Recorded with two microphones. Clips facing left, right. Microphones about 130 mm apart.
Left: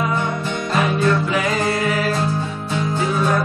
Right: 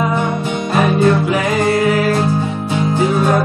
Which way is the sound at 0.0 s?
20° right (ahead or behind).